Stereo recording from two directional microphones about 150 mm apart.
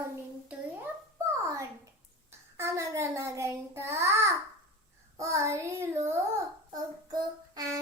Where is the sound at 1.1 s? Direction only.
20° right (ahead or behind).